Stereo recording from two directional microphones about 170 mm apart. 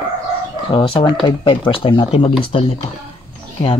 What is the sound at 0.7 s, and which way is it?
Speech, 30° left (ahead or behind).